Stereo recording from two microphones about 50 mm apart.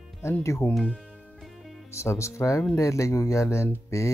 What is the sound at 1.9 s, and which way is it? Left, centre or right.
Speech, left.